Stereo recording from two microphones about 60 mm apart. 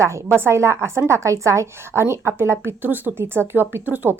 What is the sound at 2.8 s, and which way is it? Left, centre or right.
A woman's voice, right.